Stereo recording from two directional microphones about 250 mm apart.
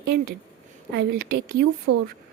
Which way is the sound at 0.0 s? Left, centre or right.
Right.